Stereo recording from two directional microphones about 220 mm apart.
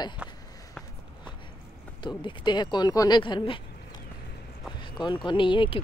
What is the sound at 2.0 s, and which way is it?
Speech, 20° left (ahead or behind).